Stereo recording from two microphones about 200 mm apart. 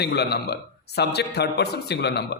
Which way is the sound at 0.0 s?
55° left (ahead or behind).